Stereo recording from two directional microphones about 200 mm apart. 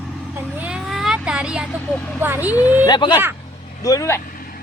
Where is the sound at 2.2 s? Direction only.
10° right (ahead or behind).